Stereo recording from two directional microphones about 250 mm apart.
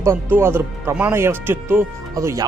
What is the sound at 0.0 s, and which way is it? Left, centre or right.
Speech, centre.